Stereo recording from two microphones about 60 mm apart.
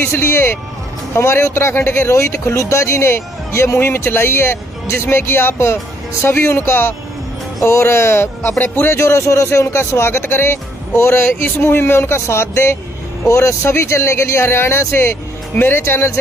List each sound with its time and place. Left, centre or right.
0.1 s speech: left
8.5 s speech: left